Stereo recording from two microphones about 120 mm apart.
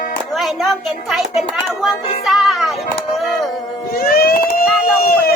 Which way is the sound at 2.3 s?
Centre (ahead or behind).